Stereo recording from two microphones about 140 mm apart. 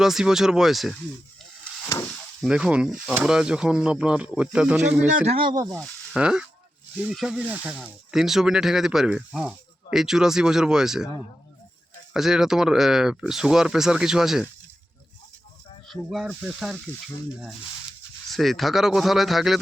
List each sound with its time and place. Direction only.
0.0 s speech: 5° right (ahead or behind)
2.4 s speech: 5° right (ahead or behind)
5.1 s speech: 50° right (ahead or behind)
5.5 s speech: 30° right (ahead or behind)
5.7 s speech: 5° right (ahead or behind)
12.1 s speech: 5° right (ahead or behind)
15.9 s speech: centre (ahead or behind)
18.3 s speech: centre (ahead or behind)